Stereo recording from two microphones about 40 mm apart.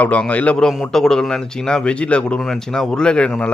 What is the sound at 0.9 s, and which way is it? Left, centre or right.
Speech, centre.